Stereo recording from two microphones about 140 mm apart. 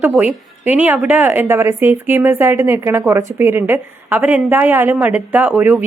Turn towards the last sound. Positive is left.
turn(degrees=-15)  # may be behind; listen again after turning